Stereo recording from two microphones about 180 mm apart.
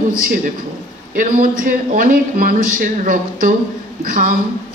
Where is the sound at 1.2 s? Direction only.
50° right (ahead or behind).